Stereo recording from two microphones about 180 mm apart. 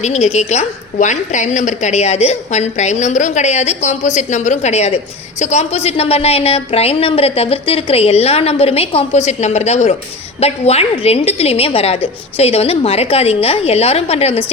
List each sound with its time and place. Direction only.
0.0 s a woman's voice: 40° left (ahead or behind)